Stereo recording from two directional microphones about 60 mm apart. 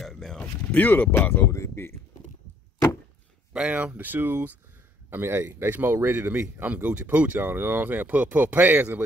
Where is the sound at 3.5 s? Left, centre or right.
Centre.